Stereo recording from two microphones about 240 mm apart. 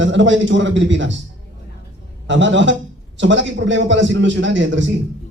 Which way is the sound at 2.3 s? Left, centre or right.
Right.